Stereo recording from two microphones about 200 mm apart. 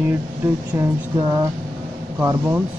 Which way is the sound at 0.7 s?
15° right (ahead or behind).